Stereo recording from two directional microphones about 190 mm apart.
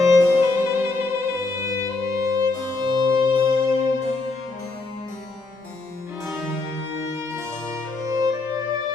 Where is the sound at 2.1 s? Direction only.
20° right (ahead or behind).